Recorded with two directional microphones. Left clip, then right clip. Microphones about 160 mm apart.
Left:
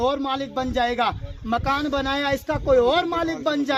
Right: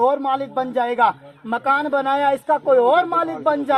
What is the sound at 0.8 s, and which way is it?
Speech, 15° left (ahead or behind).